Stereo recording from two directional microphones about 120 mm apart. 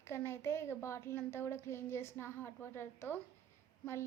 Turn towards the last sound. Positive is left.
turn(degrees=20)  # may be behind; listen again after turning